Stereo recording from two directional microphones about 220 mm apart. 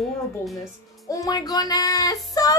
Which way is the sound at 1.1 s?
15° left (ahead or behind).